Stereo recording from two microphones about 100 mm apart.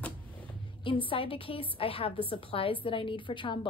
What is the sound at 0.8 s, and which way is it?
A woman's voice, 60° left (ahead or behind).